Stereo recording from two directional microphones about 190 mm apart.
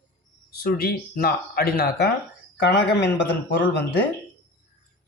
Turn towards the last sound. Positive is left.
turn(degrees=60)  # may be behind; listen again after turning